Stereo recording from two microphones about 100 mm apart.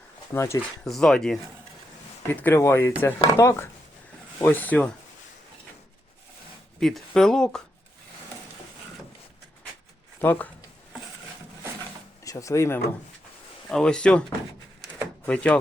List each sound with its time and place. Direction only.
0.3 s speech: 30° left (ahead or behind)
0.9 s speech: 5° left (ahead or behind)
2.3 s speech: 20° left (ahead or behind)
4.4 s speech: 15° left (ahead or behind)
6.7 s speech: 5° left (ahead or behind)
10.2 s speech: 20° left (ahead or behind)
12.2 s speech: 35° left (ahead or behind)
13.7 s speech: 5° left (ahead or behind)
15.3 s speech: 10° left (ahead or behind)